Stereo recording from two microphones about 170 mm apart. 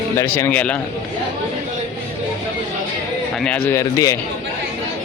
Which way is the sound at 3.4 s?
10° left (ahead or behind).